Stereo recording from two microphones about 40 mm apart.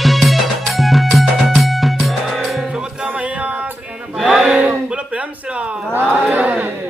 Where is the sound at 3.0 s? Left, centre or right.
Right.